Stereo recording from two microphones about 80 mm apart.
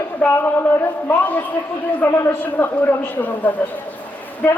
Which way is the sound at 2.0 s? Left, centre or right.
Left.